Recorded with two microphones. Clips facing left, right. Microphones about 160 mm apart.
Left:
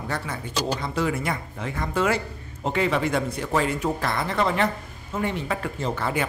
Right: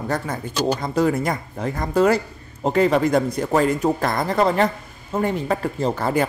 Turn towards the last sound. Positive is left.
turn(degrees=-40)  # may be behind; listen again after turning